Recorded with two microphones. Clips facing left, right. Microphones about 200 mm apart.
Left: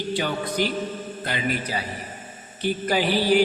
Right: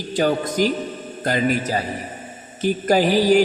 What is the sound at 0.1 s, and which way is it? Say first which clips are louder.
A man's voice: right 8 dB; 45° right (ahead or behind).